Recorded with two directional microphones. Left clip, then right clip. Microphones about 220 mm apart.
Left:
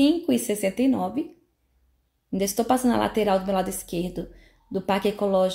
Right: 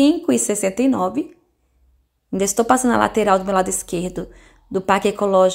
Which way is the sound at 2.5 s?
15° right (ahead or behind).